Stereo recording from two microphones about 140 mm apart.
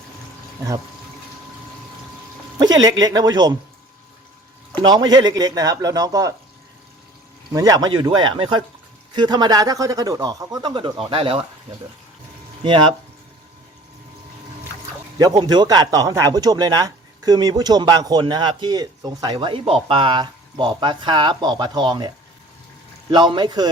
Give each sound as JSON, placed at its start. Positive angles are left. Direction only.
{"t": 2.6, "sound": "speech", "side_deg": -30}
{"t": 4.8, "sound": "speech", "side_deg": -30}
{"t": 7.5, "sound": "speech", "side_deg": -25}
{"t": 12.6, "sound": "speech", "side_deg": -35}
{"t": 15.2, "sound": "speech", "side_deg": -30}